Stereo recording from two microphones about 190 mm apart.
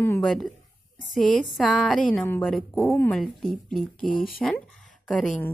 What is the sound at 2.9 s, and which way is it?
Speech, 10° left (ahead or behind).